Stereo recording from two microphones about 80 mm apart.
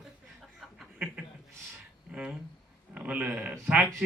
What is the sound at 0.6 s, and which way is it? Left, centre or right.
Chuckle, centre.